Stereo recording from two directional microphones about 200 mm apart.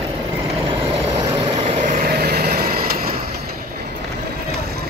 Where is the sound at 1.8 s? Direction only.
45° right (ahead or behind).